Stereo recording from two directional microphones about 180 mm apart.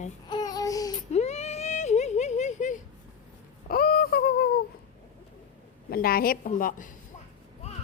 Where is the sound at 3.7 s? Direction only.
55° left (ahead or behind).